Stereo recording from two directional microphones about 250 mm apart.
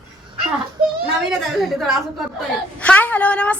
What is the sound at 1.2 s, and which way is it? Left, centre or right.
A woman's voice, centre.